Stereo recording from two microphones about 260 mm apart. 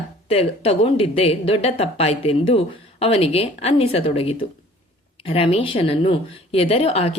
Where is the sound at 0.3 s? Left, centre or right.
Left.